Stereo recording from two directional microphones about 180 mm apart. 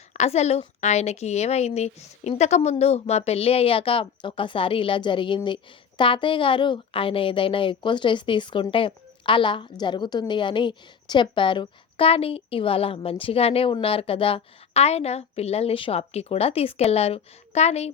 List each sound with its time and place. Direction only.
0.1 s a woman's voice: 40° left (ahead or behind)